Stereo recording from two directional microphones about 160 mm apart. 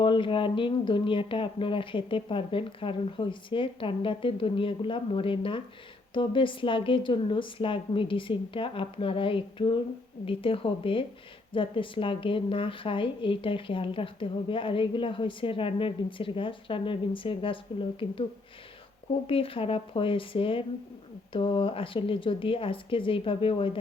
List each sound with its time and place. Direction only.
0.0 s a woman's voice: 30° left (ahead or behind)
19.3 s a woman's voice: 35° left (ahead or behind)